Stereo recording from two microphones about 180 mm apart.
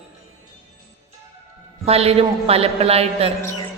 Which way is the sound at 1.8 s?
35° right (ahead or behind).